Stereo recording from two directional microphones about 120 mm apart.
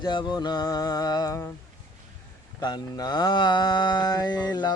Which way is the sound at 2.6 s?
35° left (ahead or behind).